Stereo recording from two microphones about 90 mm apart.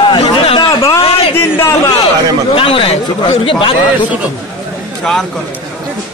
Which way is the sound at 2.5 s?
90° left.